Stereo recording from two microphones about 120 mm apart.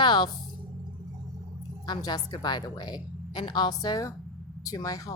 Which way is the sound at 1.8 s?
35° left (ahead or behind).